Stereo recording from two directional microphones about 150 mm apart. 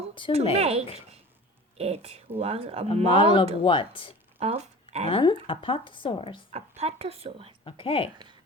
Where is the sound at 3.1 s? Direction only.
35° left (ahead or behind).